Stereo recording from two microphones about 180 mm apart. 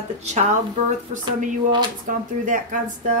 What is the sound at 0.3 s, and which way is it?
Speech, 40° right (ahead or behind).